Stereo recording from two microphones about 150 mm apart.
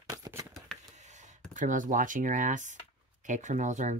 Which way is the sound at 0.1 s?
20° right (ahead or behind).